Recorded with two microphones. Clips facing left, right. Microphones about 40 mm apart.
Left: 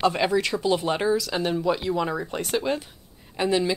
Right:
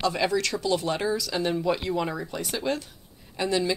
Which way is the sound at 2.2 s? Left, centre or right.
Left.